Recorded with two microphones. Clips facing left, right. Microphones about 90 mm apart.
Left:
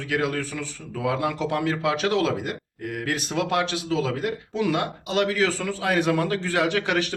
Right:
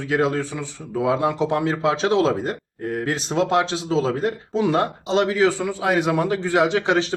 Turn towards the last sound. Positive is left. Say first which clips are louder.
# right 4 dB
turn(degrees=-25)  # may be behind; listen again after turning